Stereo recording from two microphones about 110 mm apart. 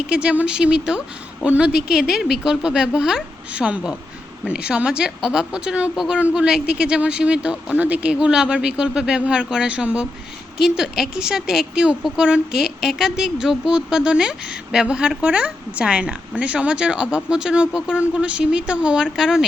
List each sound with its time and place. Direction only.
0.1 s a woman's voice: 10° right (ahead or behind)